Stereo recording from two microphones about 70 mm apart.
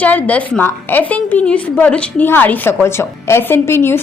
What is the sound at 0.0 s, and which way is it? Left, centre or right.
A woman's voice, left.